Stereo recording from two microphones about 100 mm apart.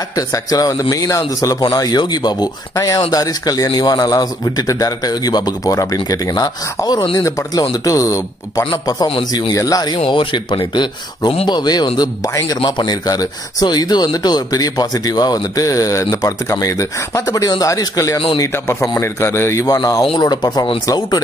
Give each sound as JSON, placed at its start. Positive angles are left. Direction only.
{"t": 0.1, "sound": "speech", "side_deg": 35}
{"t": 9.9, "sound": "speech", "side_deg": 60}
{"t": 18.4, "sound": "a man's voice", "side_deg": 25}
{"t": 19.6, "sound": "speech", "side_deg": 40}
{"t": 20.8, "sound": "speech", "side_deg": 35}